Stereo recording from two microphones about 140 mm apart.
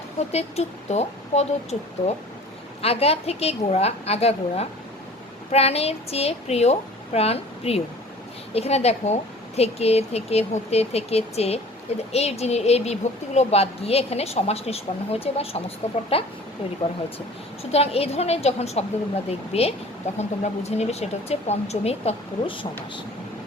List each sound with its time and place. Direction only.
0.3 s speech: 50° left (ahead or behind)
2.8 s speech: 45° left (ahead or behind)
17.6 s speech: 45° left (ahead or behind)